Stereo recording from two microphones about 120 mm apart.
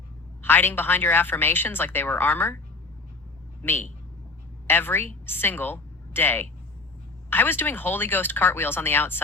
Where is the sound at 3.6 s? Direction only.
15° left (ahead or behind).